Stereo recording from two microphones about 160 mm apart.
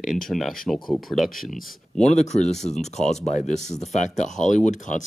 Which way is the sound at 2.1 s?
45° left (ahead or behind).